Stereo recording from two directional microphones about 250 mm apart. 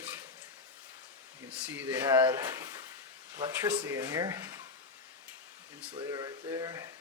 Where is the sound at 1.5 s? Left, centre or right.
Centre.